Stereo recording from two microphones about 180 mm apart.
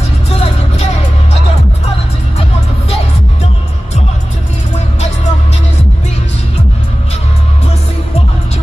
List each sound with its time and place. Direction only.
0.4 s music: 40° left (ahead or behind)